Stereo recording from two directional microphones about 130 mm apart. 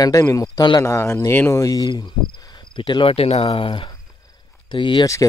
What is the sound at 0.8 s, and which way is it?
Speech, 20° left (ahead or behind).